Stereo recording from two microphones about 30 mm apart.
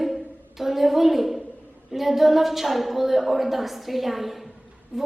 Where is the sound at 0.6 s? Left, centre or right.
Centre.